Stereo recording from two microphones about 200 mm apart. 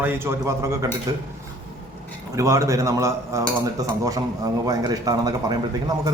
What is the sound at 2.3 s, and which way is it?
A man's voice, 15° right (ahead or behind).